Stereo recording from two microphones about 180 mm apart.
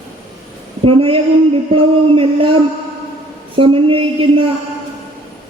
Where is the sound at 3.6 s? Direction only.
30° right (ahead or behind).